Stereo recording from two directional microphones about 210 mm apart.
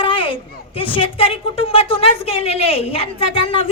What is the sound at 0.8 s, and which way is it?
A woman's voice, 25° left (ahead or behind).